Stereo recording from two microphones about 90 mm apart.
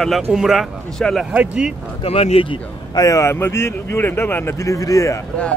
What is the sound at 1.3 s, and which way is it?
Speech, 15° right (ahead or behind).